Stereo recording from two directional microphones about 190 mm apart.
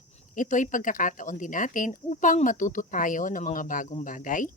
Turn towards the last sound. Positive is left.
turn(degrees=45)  # may be behind; listen again after turning